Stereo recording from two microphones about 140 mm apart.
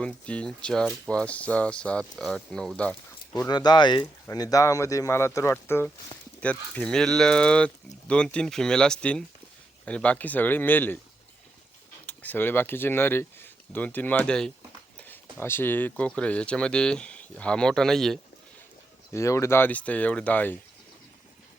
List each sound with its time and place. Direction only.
0.0 s speech: 10° left (ahead or behind)
3.3 s speech: 30° left (ahead or behind); by 10.9 s 15° left (ahead or behind)
12.0 s speech: 10° left (ahead or behind)
19.1 s speech: 20° left (ahead or behind)